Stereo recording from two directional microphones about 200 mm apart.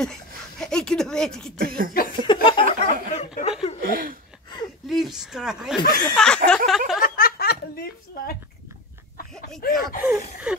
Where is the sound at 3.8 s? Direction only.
45° right (ahead or behind).